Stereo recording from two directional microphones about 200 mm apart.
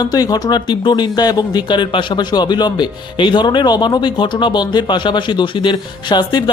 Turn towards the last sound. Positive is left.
turn(degrees=20)  # may be behind; listen again after turning